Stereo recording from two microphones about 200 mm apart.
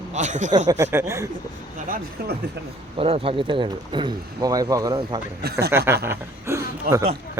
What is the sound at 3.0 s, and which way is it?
Speech, 25° right (ahead or behind).